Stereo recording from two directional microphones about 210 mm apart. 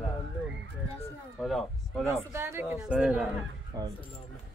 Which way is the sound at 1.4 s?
Centre (ahead or behind).